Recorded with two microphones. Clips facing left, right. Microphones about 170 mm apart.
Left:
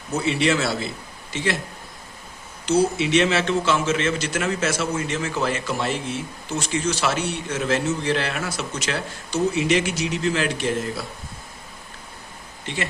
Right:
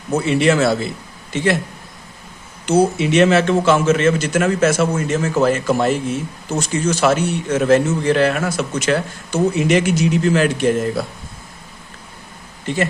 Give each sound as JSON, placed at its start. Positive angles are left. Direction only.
{"t": 0.3, "sound": "a man's voice", "side_deg": -50}
{"t": 2.6, "sound": "a man's voice", "side_deg": -50}
{"t": 12.6, "sound": "speech", "side_deg": -45}